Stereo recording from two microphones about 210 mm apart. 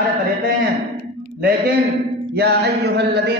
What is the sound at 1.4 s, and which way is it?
Mantra, 50° right (ahead or behind).